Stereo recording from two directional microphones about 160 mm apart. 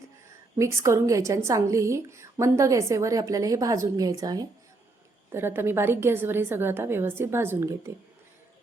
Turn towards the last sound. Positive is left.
turn(degrees=-15)  # may be behind; listen again after turning